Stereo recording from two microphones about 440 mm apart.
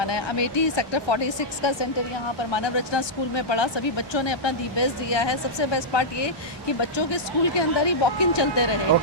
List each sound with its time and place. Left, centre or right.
0.0 s speech: left